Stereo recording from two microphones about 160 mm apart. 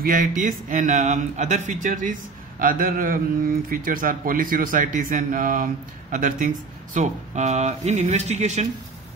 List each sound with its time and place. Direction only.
0.0 s speech: 60° right (ahead or behind)